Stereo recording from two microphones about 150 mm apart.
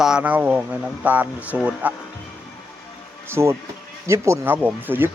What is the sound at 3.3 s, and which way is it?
Speech, 20° right (ahead or behind).